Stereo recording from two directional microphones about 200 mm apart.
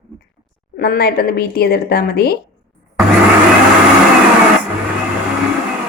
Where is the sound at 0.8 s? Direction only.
50° left (ahead or behind).